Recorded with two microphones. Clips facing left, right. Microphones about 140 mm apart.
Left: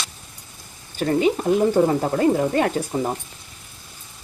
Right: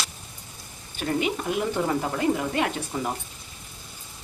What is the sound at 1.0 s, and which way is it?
Speech, 40° left (ahead or behind).